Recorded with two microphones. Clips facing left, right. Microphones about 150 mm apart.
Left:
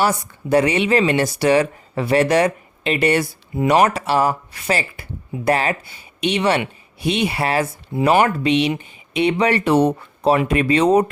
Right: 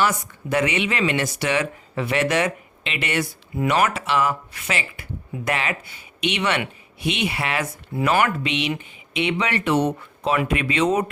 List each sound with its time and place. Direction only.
0.0 s speech: 35° left (ahead or behind)